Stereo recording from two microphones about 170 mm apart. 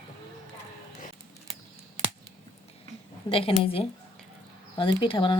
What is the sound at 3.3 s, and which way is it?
Speech, 35° left (ahead or behind).